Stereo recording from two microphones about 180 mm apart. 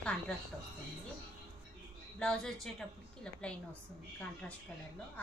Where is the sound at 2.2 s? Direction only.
5° left (ahead or behind).